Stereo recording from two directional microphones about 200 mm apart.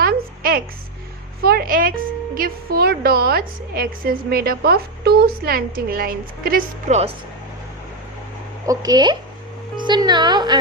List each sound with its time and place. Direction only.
0.0 s a sound: 50° right (ahead or behind)
1.4 s speech: 50° right (ahead or behind)
8.6 s a child's voice: 15° right (ahead or behind)